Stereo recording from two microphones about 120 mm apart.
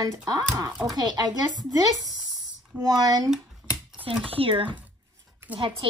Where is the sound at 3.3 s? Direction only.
10° right (ahead or behind).